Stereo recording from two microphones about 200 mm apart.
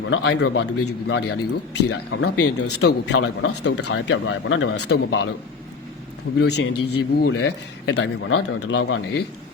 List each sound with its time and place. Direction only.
0.0 s a man's voice: 65° left (ahead or behind)
1.9 s speech: 80° left
2.6 s a man's voice: 55° left (ahead or behind)
6.4 s a man's voice: 55° left (ahead or behind); by 9.0 s 85° left